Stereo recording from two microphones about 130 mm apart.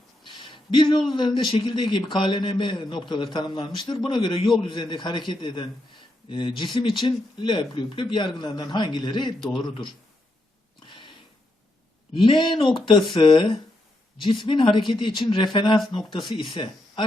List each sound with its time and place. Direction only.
0.3 s a sound: 40° left (ahead or behind)
1.1 s a man's voice: 35° left (ahead or behind)
10.8 s a sound: 40° left (ahead or behind)
12.2 s a man's voice: 40° left (ahead or behind)
16.0 s speech: centre (ahead or behind)
16.2 s speech: 35° left (ahead or behind)